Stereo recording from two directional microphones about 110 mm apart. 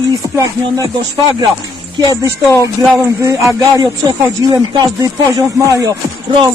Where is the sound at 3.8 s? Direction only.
35° right (ahead or behind).